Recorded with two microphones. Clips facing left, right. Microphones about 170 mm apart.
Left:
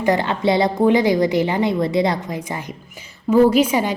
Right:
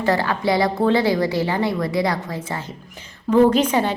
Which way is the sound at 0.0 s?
20° left (ahead or behind).